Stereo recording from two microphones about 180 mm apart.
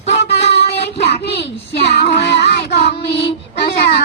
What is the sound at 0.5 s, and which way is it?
Child singing, 70° left (ahead or behind).